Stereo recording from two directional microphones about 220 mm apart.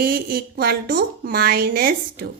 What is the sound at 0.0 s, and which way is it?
A woman's voice, 40° right (ahead or behind).